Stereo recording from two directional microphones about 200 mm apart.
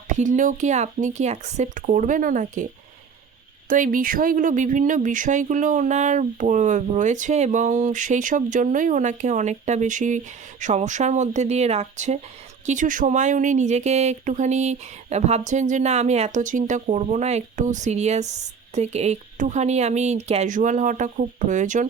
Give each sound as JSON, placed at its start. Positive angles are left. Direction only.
{"t": 0.2, "sound": "speech", "side_deg": -40}
{"t": 3.7, "sound": "speech", "side_deg": -45}